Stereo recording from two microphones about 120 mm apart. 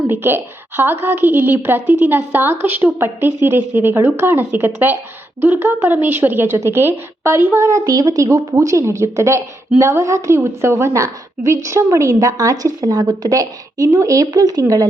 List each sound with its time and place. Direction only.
0.1 s a woman's voice: 20° right (ahead or behind)